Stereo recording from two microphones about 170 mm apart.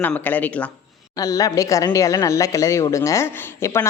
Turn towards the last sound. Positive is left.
turn(degrees=15)  # may be behind; listen again after turning